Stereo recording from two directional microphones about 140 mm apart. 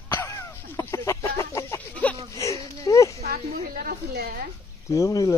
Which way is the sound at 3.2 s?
90° right.